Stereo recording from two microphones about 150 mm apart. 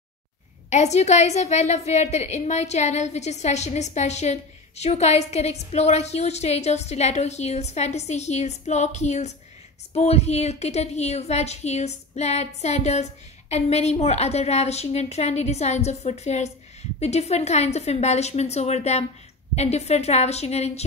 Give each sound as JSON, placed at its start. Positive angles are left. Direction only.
{"t": 0.7, "sound": "a woman's voice", "side_deg": 50}